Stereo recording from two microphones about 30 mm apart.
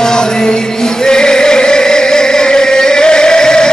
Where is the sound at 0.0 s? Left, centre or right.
Left.